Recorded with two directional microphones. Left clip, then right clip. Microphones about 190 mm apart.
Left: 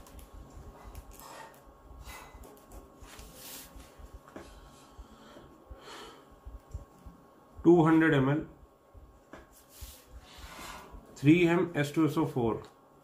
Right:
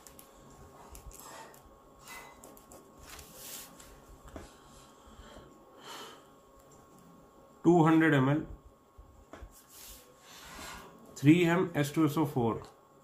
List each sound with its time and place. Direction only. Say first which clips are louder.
7.6 s speech: left 2 dB; 20° right (ahead or behind)
11.1 s speech: left 1 dB; 20° right (ahead or behind)